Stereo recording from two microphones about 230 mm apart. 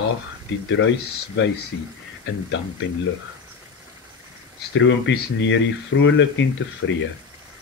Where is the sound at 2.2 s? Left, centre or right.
Left.